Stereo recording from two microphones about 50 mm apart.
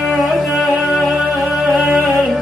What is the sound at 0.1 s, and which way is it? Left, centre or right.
Music, centre.